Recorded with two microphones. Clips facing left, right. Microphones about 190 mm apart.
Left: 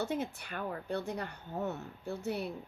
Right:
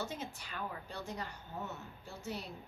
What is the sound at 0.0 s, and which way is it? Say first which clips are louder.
Speech: left 7 dB; 60° left (ahead or behind).